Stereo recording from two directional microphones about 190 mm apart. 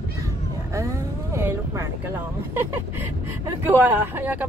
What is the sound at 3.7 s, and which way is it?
Speech, 10° right (ahead or behind).